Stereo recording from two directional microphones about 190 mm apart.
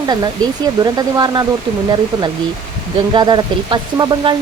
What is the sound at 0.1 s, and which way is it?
A woman's voice, 20° right (ahead or behind).